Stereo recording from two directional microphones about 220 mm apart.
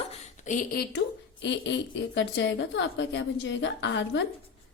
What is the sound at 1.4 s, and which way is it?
A woman's voice, 55° left (ahead or behind).